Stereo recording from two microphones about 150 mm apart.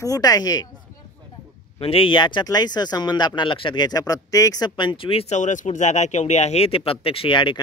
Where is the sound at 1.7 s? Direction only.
40° left (ahead or behind).